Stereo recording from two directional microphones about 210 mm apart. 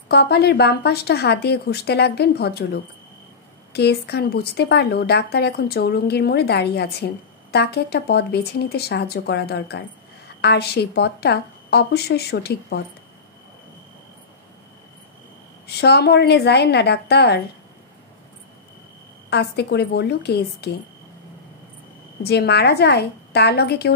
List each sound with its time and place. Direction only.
0.1 s speech: 50° left (ahead or behind)
15.6 s speech: 50° left (ahead or behind)
19.3 s speech: 50° left (ahead or behind)
22.2 s speech: 50° left (ahead or behind)